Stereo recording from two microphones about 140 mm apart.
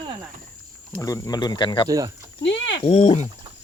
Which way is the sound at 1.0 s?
25° left (ahead or behind).